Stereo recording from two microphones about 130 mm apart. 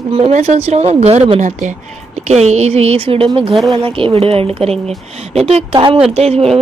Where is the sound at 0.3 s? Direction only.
60° right (ahead or behind).